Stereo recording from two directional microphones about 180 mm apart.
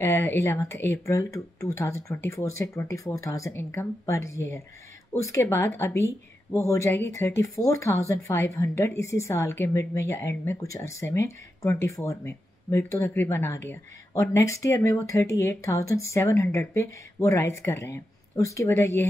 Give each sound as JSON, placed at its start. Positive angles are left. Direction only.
{"t": 0.0, "sound": "speech", "side_deg": 10}